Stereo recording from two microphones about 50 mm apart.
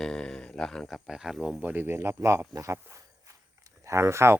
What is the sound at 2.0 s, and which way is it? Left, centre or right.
Speech, right.